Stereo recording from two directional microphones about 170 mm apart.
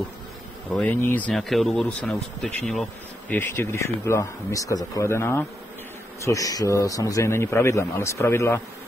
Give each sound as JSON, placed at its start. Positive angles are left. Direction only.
{"t": 0.7, "sound": "speech", "side_deg": 10}